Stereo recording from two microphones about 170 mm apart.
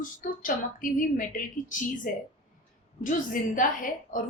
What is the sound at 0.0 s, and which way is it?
Speech, 55° left (ahead or behind).